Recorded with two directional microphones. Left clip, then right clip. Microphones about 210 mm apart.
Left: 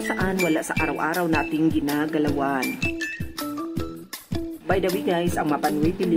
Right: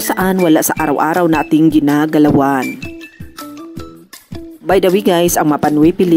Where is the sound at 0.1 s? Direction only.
40° right (ahead or behind).